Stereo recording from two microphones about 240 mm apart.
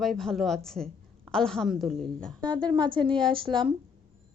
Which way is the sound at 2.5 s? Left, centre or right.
Centre.